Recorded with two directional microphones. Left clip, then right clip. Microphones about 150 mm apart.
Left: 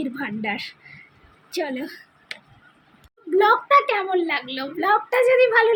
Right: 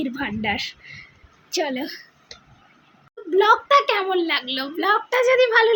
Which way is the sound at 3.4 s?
10° right (ahead or behind).